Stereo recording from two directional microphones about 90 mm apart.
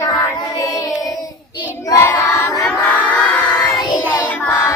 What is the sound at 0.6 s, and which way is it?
Child singing, 40° left (ahead or behind).